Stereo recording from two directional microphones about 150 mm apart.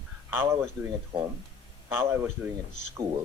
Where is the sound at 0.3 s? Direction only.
15° right (ahead or behind).